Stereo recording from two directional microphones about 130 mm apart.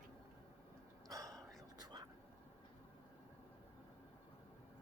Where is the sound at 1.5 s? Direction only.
30° right (ahead or behind).